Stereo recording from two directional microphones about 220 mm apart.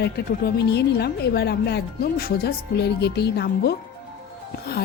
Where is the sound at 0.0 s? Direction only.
45° left (ahead or behind).